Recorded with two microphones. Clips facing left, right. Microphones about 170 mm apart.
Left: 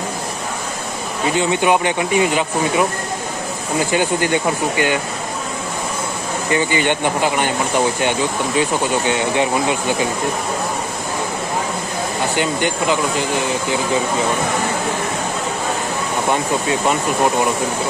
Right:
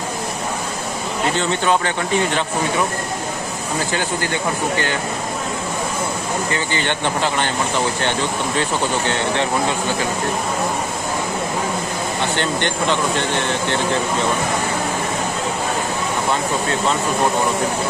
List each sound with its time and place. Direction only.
1.4 s speech: 10° left (ahead or behind)
3.9 s speech: 15° left (ahead or behind)
6.5 s speech: 15° left (ahead or behind)
8.5 s speech: 10° left (ahead or behind)
12.4 s speech: 10° left (ahead or behind)